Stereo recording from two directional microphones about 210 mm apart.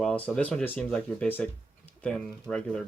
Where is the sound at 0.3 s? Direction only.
5° left (ahead or behind).